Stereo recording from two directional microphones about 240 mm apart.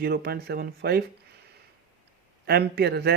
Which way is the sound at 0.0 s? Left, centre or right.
Right.